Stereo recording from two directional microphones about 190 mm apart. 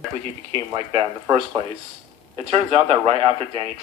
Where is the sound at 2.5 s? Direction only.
30° right (ahead or behind).